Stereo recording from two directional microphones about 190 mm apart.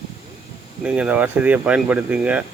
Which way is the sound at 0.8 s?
5° right (ahead or behind).